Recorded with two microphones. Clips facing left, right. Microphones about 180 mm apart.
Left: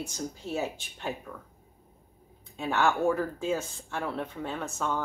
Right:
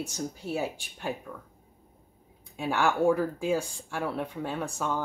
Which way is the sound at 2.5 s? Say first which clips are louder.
Even; 10° right (ahead or behind).